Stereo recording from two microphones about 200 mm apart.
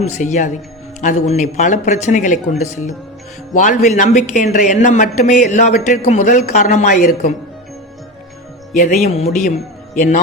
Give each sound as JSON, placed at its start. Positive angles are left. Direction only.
{"t": 0.0, "sound": "a man's voice", "side_deg": 35}
{"t": 8.8, "sound": "a man's voice", "side_deg": 35}